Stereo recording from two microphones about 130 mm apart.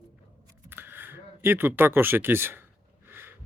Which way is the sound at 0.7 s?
15° right (ahead or behind).